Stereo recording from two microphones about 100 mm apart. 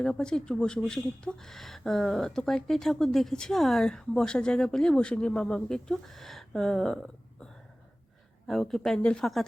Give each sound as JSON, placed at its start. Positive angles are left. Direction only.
{"t": 0.0, "sound": "speech", "side_deg": 5}
{"t": 8.4, "sound": "speech", "side_deg": 5}